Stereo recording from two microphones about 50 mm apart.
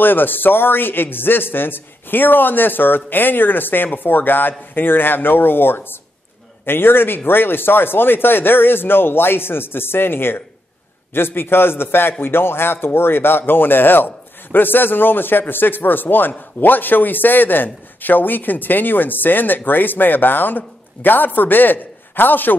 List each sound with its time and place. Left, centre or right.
0.0 s a man's voice: left